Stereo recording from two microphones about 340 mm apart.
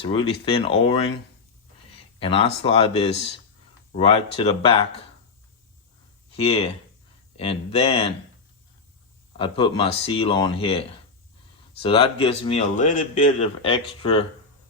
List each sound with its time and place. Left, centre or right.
0.0 s speech: centre
6.3 s speech: centre
9.4 s speech: centre